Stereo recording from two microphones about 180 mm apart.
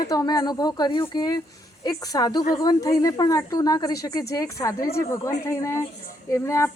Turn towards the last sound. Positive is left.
turn(degrees=15)  # may be behind; listen again after turning